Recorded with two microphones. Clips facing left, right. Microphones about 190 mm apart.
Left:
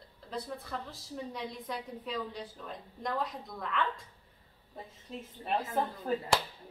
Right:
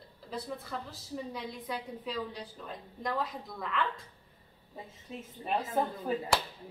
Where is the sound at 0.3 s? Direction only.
Centre (ahead or behind).